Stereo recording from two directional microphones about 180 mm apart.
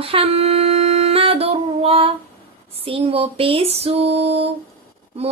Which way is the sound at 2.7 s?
30° right (ahead or behind).